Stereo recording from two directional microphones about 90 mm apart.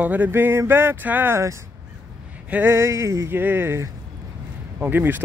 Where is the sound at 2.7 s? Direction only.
30° right (ahead or behind).